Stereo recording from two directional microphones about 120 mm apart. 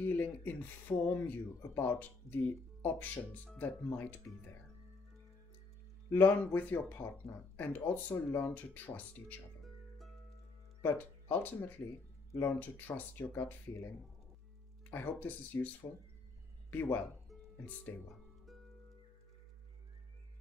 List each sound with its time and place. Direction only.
0.0 s speech: 15° left (ahead or behind)
6.0 s speech: 15° left (ahead or behind)
10.8 s speech: 15° left (ahead or behind)
14.9 s speech: 15° left (ahead or behind)